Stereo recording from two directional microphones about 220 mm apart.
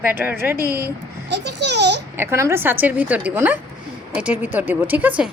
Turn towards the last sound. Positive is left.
turn(degrees=-5)  # may be behind; listen again after turning